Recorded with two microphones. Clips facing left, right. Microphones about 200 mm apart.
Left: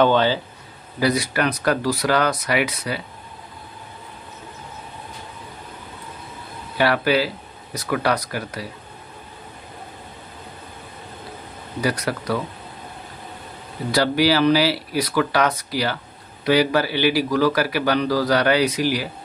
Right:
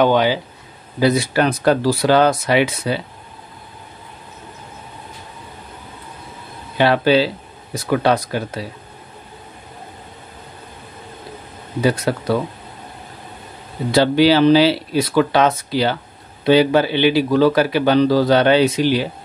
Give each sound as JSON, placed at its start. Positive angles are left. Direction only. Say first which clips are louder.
{"t": 0.0, "sound": "speech", "louder": "right 2 dB", "side_deg": -15}
{"t": 0.9, "sound": "speech", "louder": "right 5 dB", "side_deg": -25}
{"t": 6.8, "sound": "speech", "louder": "right 5 dB", "side_deg": -25}
{"t": 11.8, "sound": "speech", "louder": "right 5 dB", "side_deg": -25}
{"t": 13.9, "sound": "speech", "louder": "right 5 dB", "side_deg": -25}